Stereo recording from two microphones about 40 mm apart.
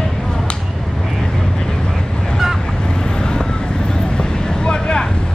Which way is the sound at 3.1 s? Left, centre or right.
Left.